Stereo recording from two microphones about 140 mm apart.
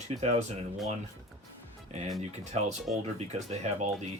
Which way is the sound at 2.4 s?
55° right (ahead or behind).